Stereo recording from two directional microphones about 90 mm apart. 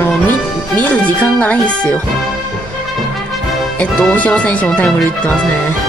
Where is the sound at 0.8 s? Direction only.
15° left (ahead or behind).